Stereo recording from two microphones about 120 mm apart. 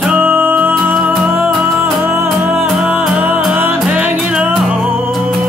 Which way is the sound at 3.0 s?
10° right (ahead or behind).